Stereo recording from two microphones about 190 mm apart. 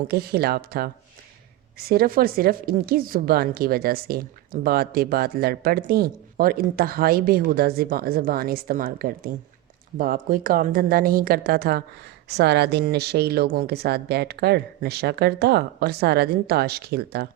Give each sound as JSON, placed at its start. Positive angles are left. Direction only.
{"t": 0.1, "sound": "speech", "side_deg": -55}